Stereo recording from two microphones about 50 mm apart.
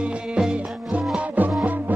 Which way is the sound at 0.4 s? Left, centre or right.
Centre.